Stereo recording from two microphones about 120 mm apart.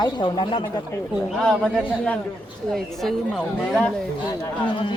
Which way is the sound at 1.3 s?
5° right (ahead or behind).